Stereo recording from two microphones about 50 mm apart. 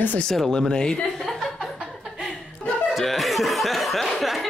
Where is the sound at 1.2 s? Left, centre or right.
Centre.